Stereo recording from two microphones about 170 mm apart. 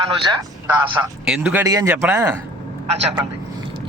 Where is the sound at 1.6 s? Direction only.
20° right (ahead or behind).